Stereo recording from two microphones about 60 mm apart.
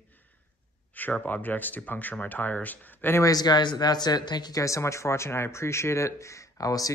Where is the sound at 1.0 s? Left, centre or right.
Left.